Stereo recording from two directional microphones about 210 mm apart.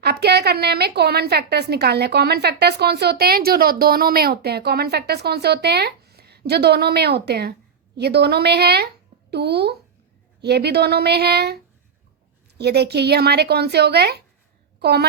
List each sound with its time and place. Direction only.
0.0 s a woman's voice: 50° right (ahead or behind)
12.5 s a woman's voice: 50° right (ahead or behind)